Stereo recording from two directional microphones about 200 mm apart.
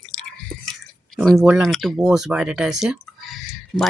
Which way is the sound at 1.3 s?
10° right (ahead or behind).